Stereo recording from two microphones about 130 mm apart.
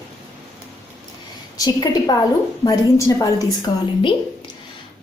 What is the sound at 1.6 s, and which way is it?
A woman's voice, 30° left (ahead or behind).